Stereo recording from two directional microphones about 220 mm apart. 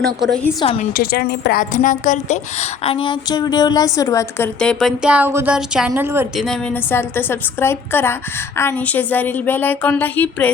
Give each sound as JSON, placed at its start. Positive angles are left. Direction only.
{"t": 0.2, "sound": "a woman's voice", "side_deg": 5}
{"t": 0.6, "sound": "a woman's voice", "side_deg": 25}
{"t": 0.9, "sound": "a woman's voice", "side_deg": 45}
{"t": 6.4, "sound": "a woman's voice", "side_deg": 5}